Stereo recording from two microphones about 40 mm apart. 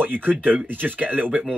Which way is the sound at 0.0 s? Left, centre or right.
Right.